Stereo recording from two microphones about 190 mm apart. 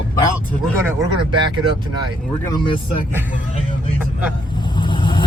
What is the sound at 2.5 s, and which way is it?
Speech, 25° left (ahead or behind).